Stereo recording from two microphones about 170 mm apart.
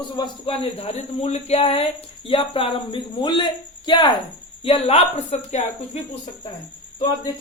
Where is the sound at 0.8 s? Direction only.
40° left (ahead or behind).